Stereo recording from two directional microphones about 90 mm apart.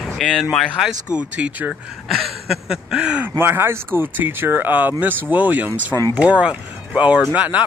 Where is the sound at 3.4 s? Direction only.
25° right (ahead or behind).